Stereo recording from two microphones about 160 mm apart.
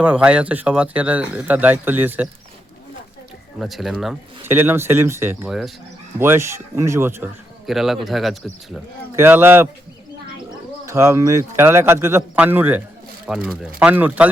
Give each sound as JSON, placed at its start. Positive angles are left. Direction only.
{"t": 0.0, "sound": "speech", "side_deg": -10}
{"t": 3.6, "sound": "speech", "side_deg": 0}
{"t": 4.4, "sound": "speech", "side_deg": -15}
{"t": 5.5, "sound": "speech", "side_deg": 0}
{"t": 6.1, "sound": "speech", "side_deg": -15}
{"t": 7.7, "sound": "speech", "side_deg": 0}
{"t": 9.1, "sound": "speech", "side_deg": -15}
{"t": 10.8, "sound": "speech", "side_deg": -20}